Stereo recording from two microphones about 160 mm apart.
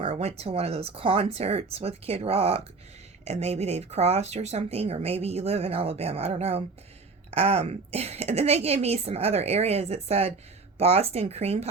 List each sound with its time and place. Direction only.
0.0 s speech: 40° right (ahead or behind)